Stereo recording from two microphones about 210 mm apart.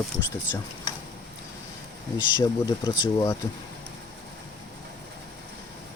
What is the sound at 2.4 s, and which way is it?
Speech, 15° left (ahead or behind).